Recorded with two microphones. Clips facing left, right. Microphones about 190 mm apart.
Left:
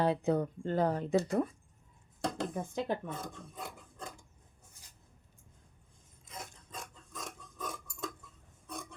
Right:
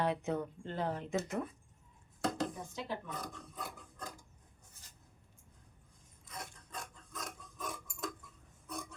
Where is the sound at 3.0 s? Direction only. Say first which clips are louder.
Left 3 dB; 25° left (ahead or behind).